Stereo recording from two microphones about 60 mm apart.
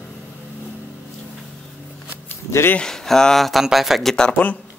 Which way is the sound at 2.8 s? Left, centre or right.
Centre.